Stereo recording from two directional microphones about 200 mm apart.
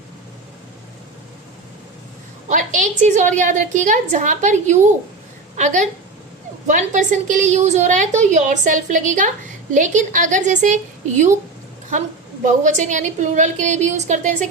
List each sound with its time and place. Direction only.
2.5 s a woman's voice: 40° right (ahead or behind)
11.9 s a woman's voice: 35° right (ahead or behind)